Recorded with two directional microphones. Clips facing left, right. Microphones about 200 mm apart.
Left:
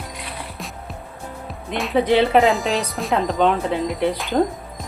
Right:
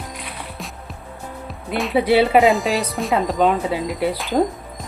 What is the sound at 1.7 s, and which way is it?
Speech, 5° right (ahead or behind).